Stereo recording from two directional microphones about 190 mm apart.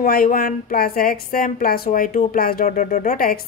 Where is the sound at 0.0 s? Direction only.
50° left (ahead or behind).